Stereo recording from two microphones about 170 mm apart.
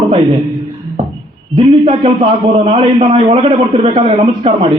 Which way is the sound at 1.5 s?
30° right (ahead or behind).